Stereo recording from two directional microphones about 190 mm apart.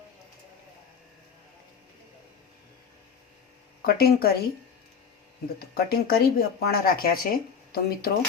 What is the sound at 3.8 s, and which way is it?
Speech, 55° left (ahead or behind).